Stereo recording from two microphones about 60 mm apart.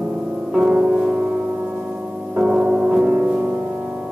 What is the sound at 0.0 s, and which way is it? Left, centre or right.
Music, centre.